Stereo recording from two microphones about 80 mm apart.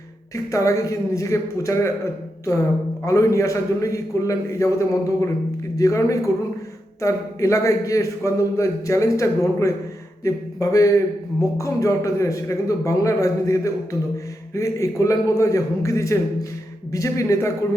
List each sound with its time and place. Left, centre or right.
0.3 s a man's voice: left
3.0 s a man's voice: left